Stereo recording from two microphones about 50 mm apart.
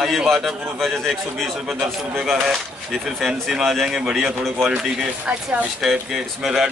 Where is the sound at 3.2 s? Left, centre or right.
Centre.